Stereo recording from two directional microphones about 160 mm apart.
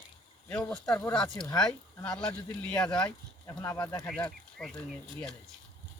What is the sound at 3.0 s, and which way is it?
Speech, 25° left (ahead or behind).